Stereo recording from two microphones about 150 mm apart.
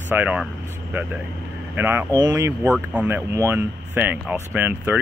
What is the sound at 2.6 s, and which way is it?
Speech, 10° right (ahead or behind).